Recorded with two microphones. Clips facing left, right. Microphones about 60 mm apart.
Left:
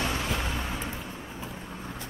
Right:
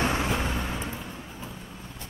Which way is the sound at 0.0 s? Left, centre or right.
Right.